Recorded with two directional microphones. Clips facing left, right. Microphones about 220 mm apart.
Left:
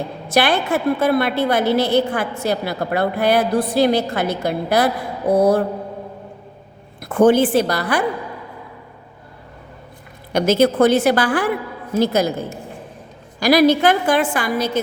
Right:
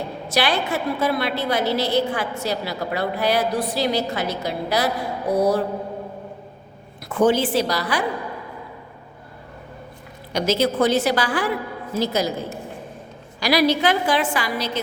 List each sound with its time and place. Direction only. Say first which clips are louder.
0.3 s a woman's voice: left 5 dB; 55° left (ahead or behind)
7.0 s a woman's voice: left 5 dB; 55° left (ahead or behind)
10.3 s a woman's voice: left 5 dB; 55° left (ahead or behind)
13.4 s a woman's voice: left 5 dB; 50° left (ahead or behind)